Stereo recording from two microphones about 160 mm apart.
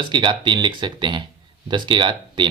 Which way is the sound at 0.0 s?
30° right (ahead or behind).